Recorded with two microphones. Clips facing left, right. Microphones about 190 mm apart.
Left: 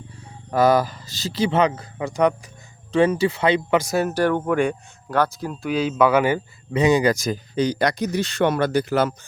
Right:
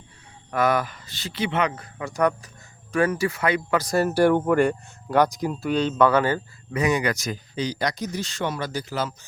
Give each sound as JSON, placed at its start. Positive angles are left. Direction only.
{"t": 0.5, "sound": "speech", "side_deg": 35}
{"t": 3.8, "sound": "speech", "side_deg": 10}
{"t": 4.0, "sound": "speech", "side_deg": -10}
{"t": 5.1, "sound": "speech", "side_deg": -15}
{"t": 5.6, "sound": "speech", "side_deg": 5}
{"t": 6.7, "sound": "speech", "side_deg": 25}
{"t": 7.5, "sound": "speech", "side_deg": 55}